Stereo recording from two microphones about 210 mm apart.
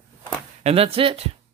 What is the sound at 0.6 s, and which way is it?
Speech, 30° right (ahead or behind).